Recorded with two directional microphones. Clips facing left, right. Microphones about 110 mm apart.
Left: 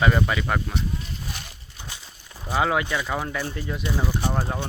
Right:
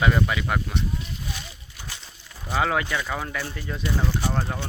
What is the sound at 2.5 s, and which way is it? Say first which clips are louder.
Speech: left 1 dB; 15° left (ahead or behind).